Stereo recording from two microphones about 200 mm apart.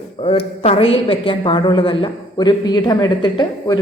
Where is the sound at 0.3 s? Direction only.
30° left (ahead or behind).